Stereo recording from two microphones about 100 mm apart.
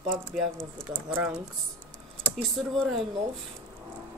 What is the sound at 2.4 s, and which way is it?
Speech, centre (ahead or behind).